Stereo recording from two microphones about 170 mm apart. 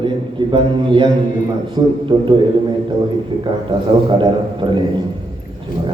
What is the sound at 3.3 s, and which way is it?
A man's voice, 30° right (ahead or behind).